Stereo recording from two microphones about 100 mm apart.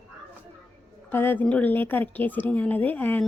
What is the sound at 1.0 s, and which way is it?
A woman's voice, 20° left (ahead or behind).